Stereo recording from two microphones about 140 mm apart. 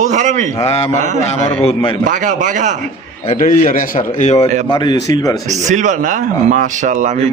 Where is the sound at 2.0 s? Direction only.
65° right (ahead or behind).